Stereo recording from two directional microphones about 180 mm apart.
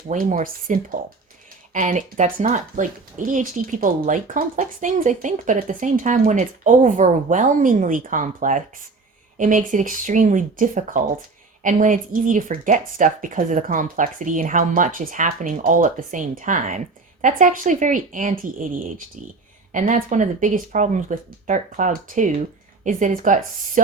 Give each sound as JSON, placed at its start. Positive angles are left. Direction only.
{"t": 0.1, "sound": "a woman's voice", "side_deg": -45}